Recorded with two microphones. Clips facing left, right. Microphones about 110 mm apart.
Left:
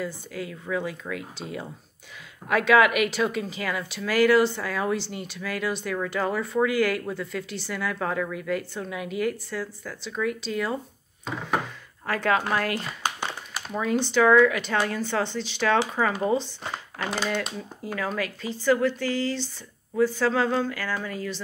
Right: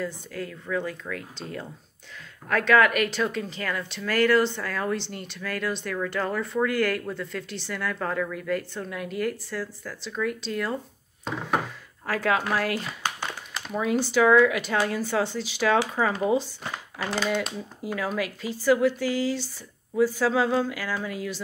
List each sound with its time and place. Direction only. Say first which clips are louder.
0.0 s speech: even; 5° left (ahead or behind)
13.0 s a sound: left 1 dB; 20° left (ahead or behind)
13.6 s speech: even; 5° right (ahead or behind)